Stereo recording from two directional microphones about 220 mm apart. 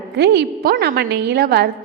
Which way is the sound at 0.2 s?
45° right (ahead or behind).